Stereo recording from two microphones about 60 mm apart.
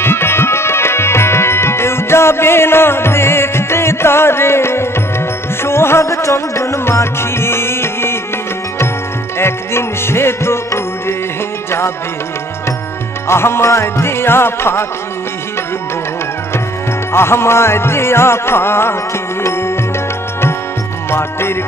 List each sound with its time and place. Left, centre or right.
0.0 s music: left
9.4 s music: left
13.3 s music: left
17.1 s music: left
21.1 s music: left